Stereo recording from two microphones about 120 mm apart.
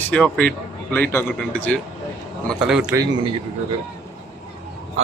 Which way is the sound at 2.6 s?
5° right (ahead or behind).